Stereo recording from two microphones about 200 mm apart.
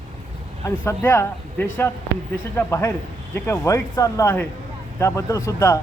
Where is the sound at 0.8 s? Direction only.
15° left (ahead or behind).